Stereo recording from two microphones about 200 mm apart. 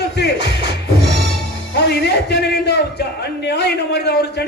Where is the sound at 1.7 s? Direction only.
55° left (ahead or behind).